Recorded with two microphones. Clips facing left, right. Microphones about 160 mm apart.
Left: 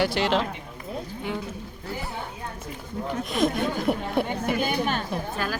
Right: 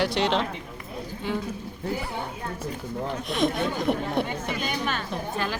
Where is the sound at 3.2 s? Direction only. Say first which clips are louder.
Left 1 dB; centre (ahead or behind).